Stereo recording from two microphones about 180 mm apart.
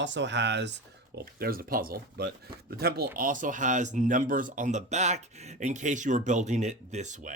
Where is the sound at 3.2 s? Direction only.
50° right (ahead or behind).